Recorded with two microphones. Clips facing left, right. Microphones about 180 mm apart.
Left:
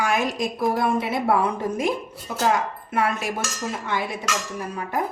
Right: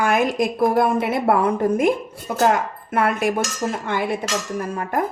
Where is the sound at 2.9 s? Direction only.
55° right (ahead or behind).